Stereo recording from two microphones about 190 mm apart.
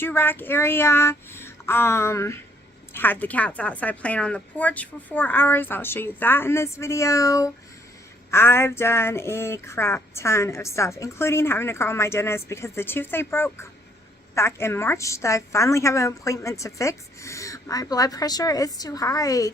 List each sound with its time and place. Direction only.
0.0 s speech: 10° left (ahead or behind)